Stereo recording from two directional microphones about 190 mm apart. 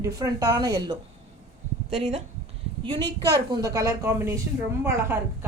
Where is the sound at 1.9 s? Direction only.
35° right (ahead or behind).